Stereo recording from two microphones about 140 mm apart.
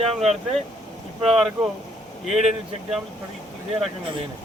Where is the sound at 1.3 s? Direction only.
Centre (ahead or behind).